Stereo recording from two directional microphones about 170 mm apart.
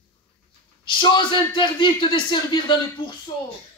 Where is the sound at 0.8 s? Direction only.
30° left (ahead or behind).